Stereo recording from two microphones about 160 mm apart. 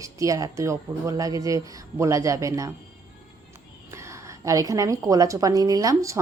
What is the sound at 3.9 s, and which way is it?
A woman's voice, 15° right (ahead or behind).